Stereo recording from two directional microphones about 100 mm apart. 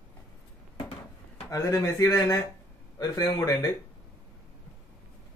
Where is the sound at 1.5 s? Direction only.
35° left (ahead or behind).